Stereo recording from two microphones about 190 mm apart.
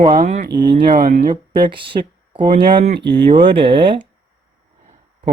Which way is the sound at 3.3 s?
30° right (ahead or behind).